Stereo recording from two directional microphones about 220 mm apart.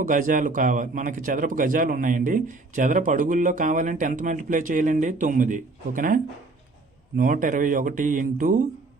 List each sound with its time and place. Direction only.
0.0 s speech: 35° right (ahead or behind)